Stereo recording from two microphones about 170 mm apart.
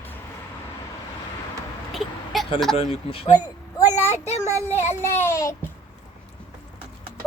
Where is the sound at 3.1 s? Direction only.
35° left (ahead or behind).